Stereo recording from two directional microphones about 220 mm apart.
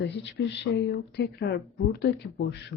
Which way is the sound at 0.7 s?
50° left (ahead or behind).